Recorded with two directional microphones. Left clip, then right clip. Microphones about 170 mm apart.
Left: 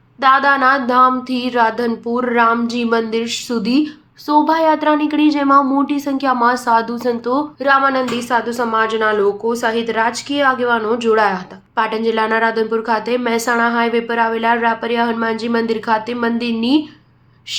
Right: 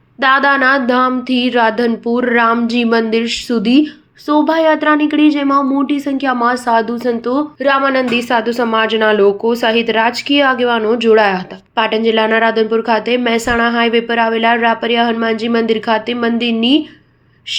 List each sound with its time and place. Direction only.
0.2 s a woman's voice: 25° right (ahead or behind)